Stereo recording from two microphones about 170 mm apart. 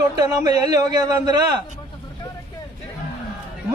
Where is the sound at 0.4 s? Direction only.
20° right (ahead or behind).